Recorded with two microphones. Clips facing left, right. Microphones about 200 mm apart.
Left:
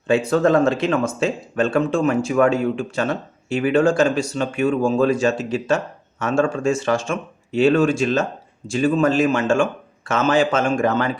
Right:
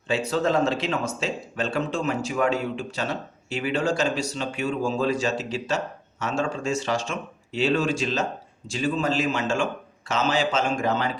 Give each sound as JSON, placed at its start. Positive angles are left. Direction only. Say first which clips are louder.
{"t": 0.1, "sound": "speech", "louder": "left 7 dB", "side_deg": 50}